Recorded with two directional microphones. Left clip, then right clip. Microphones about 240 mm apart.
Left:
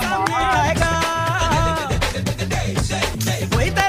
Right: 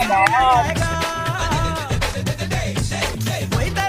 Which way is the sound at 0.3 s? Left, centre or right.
Centre.